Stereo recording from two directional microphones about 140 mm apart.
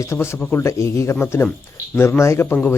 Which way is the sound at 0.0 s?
20° left (ahead or behind).